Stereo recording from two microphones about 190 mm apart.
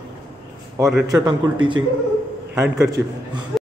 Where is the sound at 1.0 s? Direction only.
20° right (ahead or behind).